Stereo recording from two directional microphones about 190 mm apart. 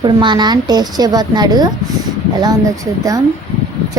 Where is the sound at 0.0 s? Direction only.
25° right (ahead or behind).